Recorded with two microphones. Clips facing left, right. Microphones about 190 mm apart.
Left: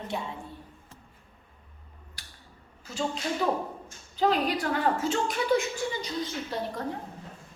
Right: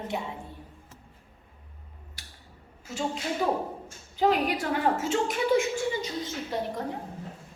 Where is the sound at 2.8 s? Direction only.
25° right (ahead or behind).